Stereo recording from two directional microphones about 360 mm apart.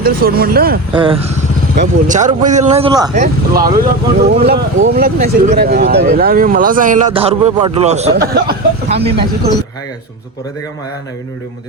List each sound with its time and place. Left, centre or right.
0.0 s speech: right
4.2 s speech: right